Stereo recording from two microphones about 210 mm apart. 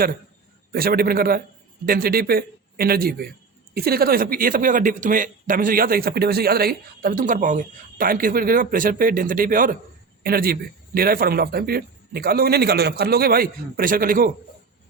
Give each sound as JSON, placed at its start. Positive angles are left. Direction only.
{"t": 0.7, "sound": "speech", "side_deg": -45}